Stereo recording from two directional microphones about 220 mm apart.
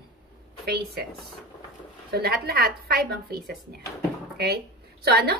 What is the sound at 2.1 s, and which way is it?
A woman's voice, 45° right (ahead or behind).